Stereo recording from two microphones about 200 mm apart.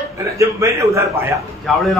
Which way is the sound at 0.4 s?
15° right (ahead or behind).